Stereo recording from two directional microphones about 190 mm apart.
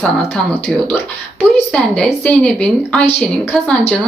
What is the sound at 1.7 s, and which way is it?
A woman's voice, 5° left (ahead or behind).